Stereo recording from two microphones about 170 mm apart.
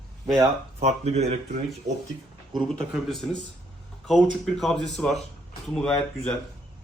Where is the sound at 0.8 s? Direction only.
40° right (ahead or behind).